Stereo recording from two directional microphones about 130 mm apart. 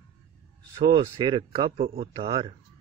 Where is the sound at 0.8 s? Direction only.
35° right (ahead or behind).